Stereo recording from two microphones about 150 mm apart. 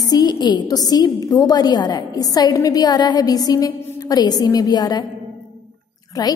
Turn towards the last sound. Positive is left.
turn(degrees=25)  # may be behind; listen again after turning